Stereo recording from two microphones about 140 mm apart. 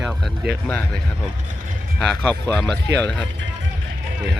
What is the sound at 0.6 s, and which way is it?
Speech, 10° left (ahead or behind).